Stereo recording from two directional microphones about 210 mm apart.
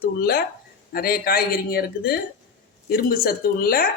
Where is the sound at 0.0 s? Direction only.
45° left (ahead or behind).